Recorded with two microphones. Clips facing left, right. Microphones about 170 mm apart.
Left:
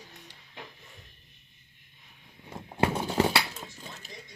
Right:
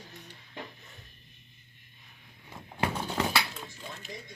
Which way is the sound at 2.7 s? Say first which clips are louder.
Left 5 dB; 30° left (ahead or behind).